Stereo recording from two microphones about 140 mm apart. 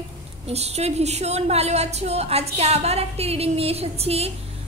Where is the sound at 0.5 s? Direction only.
50° right (ahead or behind).